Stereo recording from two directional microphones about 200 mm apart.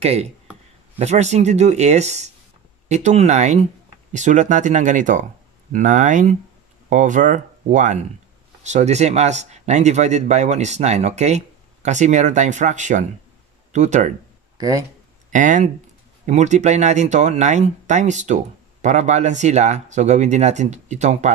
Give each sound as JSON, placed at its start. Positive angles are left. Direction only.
{"t": 0.0, "sound": "speech", "side_deg": -30}
{"t": 14.6, "sound": "speech", "side_deg": -15}
{"t": 15.3, "sound": "speech", "side_deg": -40}